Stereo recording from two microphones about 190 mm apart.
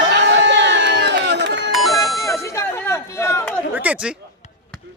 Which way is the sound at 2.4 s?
15° left (ahead or behind).